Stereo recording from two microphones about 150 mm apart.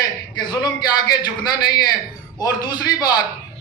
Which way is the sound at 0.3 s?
30° left (ahead or behind).